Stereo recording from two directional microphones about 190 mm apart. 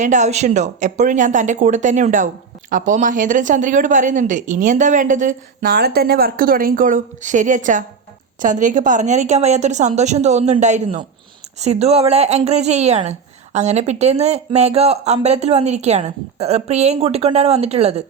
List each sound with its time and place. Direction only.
0.0 s speech: 40° right (ahead or behind)